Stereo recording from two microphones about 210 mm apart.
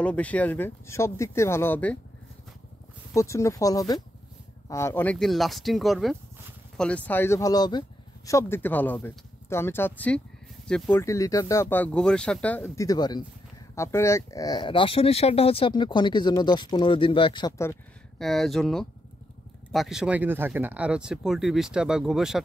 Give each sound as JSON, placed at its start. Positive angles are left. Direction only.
{"t": 0.0, "sound": "speech", "side_deg": 5}
{"t": 3.2, "sound": "speech", "side_deg": 15}
{"t": 18.2, "sound": "speech", "side_deg": 0}